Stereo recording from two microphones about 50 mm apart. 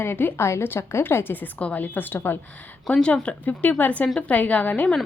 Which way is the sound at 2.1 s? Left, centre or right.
Left.